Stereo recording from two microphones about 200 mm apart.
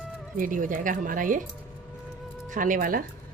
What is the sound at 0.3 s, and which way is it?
Speech, 40° right (ahead or behind).